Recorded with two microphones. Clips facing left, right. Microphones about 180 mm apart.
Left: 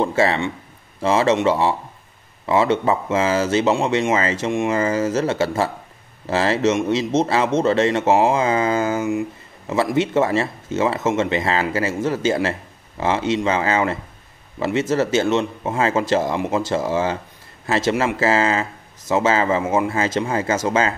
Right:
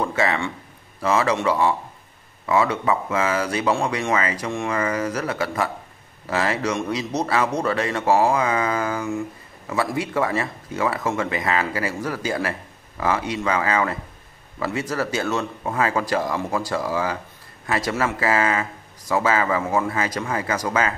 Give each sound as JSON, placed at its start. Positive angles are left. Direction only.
{"t": 0.0, "sound": "speech", "side_deg": 30}